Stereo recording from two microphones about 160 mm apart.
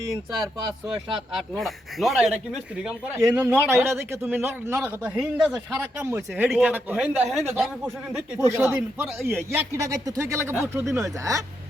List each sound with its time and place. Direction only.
1.4 s speech: centre (ahead or behind)
3.2 s speech: 15° right (ahead or behind)
5.8 s speech: 15° right (ahead or behind)
8.1 s speech: 20° right (ahead or behind)